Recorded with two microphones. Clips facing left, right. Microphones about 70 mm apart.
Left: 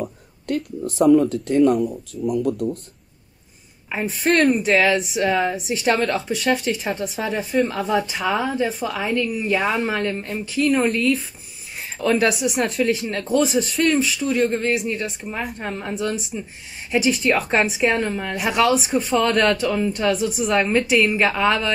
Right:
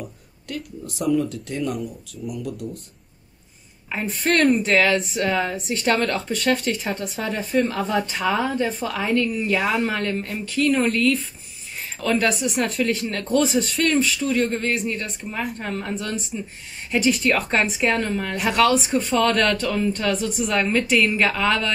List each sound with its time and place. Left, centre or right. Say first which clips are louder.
0.0 s speech: left 7 dB; left
3.9 s a woman's voice: left 2 dB; centre
17.5 s a woman's voice: left 2 dB; centre